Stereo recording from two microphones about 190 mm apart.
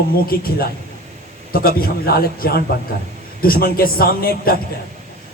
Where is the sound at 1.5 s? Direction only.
50° left (ahead or behind).